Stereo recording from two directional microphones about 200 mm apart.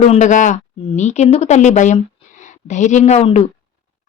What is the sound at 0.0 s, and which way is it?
A woman's voice, 35° left (ahead or behind).